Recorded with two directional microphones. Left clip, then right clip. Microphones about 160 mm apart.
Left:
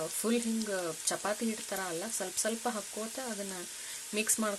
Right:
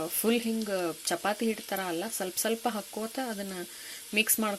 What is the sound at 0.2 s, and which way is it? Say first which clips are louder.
Speech: right 5 dB; 15° right (ahead or behind).